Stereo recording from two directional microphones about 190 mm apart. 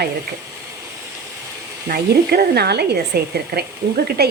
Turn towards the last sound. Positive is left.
turn(degrees=-55)  # may be behind; listen again after turning